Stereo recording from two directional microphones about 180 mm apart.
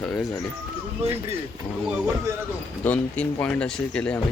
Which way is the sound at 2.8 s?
5° left (ahead or behind).